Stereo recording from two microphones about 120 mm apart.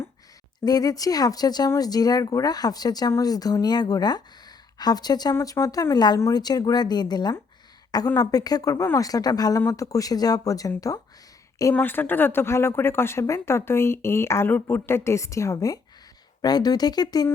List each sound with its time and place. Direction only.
0.6 s speech: 30° left (ahead or behind)
11.7 s speech: 15° left (ahead or behind); by 17.2 s 35° left (ahead or behind)